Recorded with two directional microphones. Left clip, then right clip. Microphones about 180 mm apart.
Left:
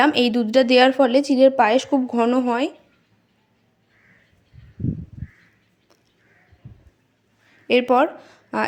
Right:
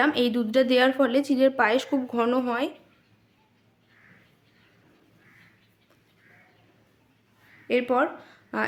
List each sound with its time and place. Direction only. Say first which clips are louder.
0.0 s speech: left 6 dB; 30° left (ahead or behind)
7.7 s speech: left 7 dB; 30° left (ahead or behind)